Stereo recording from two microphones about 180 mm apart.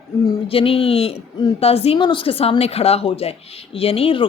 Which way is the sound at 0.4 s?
30° left (ahead or behind).